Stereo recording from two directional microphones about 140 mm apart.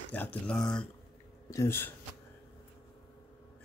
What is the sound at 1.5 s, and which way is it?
Speech, 20° left (ahead or behind).